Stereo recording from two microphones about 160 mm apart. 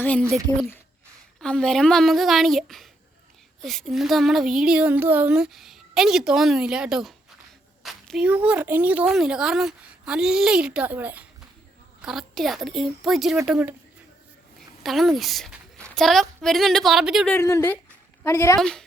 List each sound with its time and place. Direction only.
0.0 s a woman's voice: 5° left (ahead or behind)
1.4 s speech: 5° left (ahead or behind)
14.8 s a woman's voice: centre (ahead or behind)
17.3 s speech: 20° left (ahead or behind)
18.6 s speech: 5° left (ahead or behind)